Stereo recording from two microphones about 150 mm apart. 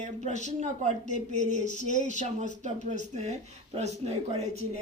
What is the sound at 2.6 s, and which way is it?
Speech, 55° right (ahead or behind).